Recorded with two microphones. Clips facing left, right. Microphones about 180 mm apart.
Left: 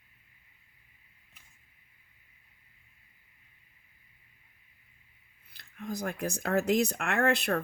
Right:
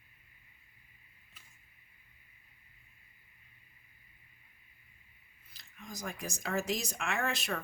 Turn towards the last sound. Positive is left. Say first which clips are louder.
# left 8 dB
turn(degrees=60)  # may be behind; listen again after turning